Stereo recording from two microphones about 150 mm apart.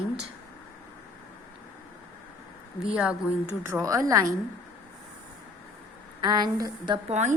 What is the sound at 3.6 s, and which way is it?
Speech, 20° right (ahead or behind).